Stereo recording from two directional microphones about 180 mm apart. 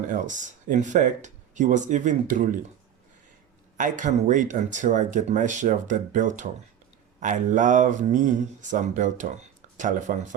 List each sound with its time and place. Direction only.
0.1 s speech: 45° right (ahead or behind)
3.8 s speech: 45° right (ahead or behind)